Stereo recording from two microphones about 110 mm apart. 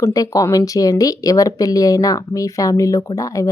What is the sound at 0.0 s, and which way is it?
Speech, 30° left (ahead or behind).